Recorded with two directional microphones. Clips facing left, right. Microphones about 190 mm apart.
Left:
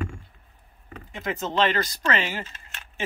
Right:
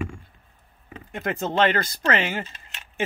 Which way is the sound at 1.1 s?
55° right (ahead or behind).